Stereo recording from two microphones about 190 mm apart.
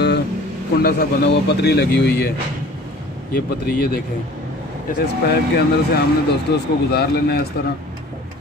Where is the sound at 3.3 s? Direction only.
55° left (ahead or behind).